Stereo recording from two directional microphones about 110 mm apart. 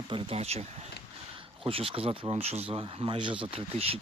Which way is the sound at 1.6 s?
55° right (ahead or behind).